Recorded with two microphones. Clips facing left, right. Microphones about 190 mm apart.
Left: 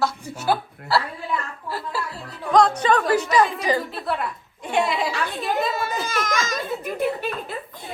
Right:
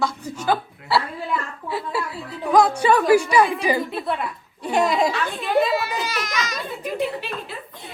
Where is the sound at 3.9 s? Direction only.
Centre (ahead or behind).